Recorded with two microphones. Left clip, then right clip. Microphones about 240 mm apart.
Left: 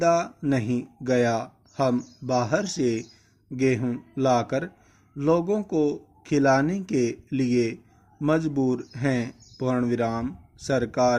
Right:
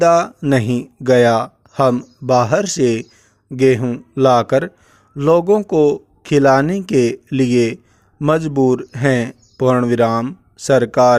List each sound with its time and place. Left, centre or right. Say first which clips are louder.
0.0 s speech: right 10 dB; right